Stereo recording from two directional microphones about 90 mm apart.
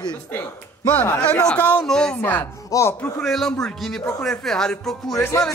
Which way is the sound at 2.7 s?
35° left (ahead or behind).